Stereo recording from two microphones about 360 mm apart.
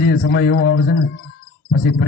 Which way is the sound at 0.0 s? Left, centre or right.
Left.